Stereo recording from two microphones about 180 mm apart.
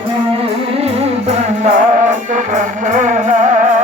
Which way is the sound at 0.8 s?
35° right (ahead or behind).